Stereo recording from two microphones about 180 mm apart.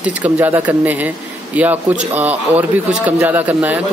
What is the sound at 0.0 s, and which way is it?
A man's voice, 10° right (ahead or behind).